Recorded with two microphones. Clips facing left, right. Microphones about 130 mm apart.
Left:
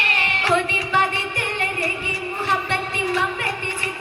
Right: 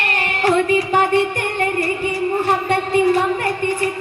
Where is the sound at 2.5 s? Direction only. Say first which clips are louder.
Right 3 dB; 45° right (ahead or behind).